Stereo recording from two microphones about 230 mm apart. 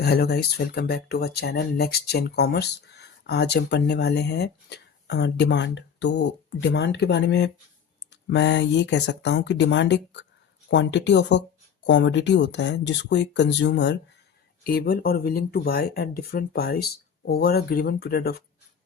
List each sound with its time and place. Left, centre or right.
0.0 s speech: left